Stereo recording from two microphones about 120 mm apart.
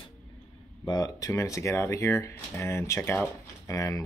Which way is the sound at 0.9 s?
30° left (ahead or behind).